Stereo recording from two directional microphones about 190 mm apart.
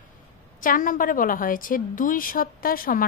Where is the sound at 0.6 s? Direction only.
45° left (ahead or behind).